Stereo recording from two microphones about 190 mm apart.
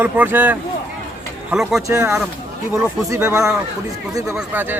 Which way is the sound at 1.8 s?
15° right (ahead or behind).